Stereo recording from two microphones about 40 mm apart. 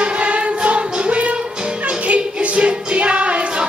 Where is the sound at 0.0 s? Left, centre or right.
Right.